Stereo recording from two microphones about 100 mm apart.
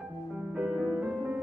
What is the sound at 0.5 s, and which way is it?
Music, 15° right (ahead or behind).